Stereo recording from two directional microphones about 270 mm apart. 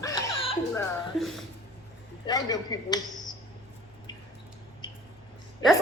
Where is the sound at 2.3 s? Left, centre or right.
Centre.